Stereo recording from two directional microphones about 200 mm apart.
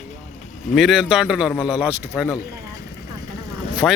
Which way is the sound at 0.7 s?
Centre (ahead or behind).